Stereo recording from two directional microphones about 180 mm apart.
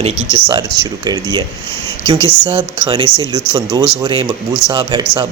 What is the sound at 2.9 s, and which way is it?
Speech, 20° right (ahead or behind).